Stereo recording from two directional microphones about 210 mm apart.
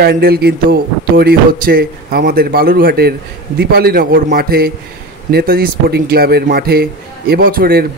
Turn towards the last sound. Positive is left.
turn(degrees=-45)  # may be behind; listen again after turning